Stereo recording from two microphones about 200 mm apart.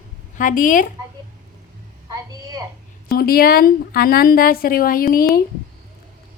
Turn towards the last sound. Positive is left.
turn(degrees=45)  # may be behind; listen again after turning